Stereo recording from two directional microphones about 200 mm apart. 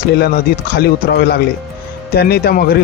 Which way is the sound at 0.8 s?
55° left (ahead or behind).